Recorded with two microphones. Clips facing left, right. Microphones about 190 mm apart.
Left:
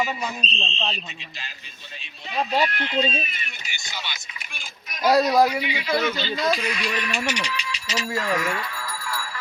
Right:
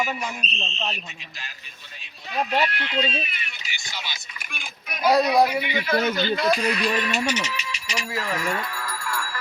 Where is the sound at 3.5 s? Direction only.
50° left (ahead or behind).